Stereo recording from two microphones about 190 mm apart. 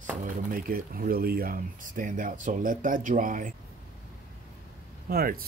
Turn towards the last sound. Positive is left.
turn(degrees=-50)  # may be behind; listen again after turning